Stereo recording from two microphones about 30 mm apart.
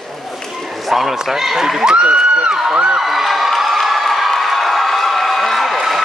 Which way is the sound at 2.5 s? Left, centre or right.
Centre.